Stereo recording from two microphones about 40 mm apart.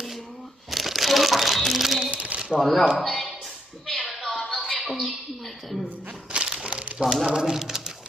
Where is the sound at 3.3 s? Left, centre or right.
Centre.